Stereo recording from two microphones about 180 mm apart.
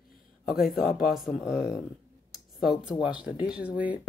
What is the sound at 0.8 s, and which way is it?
Speech, 55° left (ahead or behind).